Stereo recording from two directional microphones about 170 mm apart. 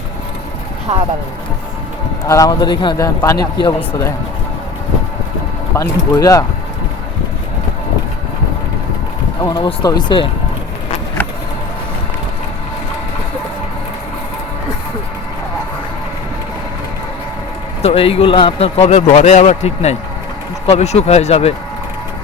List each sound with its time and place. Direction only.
2.2 s a man's voice: 20° left (ahead or behind)
5.7 s a man's voice: 20° left (ahead or behind)
9.4 s a man's voice: 20° left (ahead or behind)
17.8 s speech: 35° left (ahead or behind)